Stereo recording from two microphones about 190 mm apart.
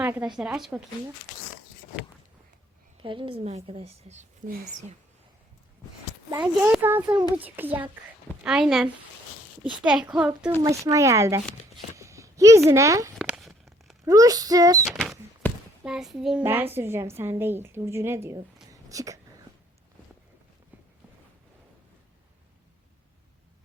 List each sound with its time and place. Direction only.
0.0 s a woman's voice: 10° right (ahead or behind)
3.0 s a woman's voice: 25° right (ahead or behind)
6.4 s a woman's voice: 10° right (ahead or behind)
13.1 s a sound: centre (ahead or behind)
14.0 s speech: 20° right (ahead or behind)
14.8 s a child's voice: centre (ahead or behind); by 19.2 s 15° right (ahead or behind)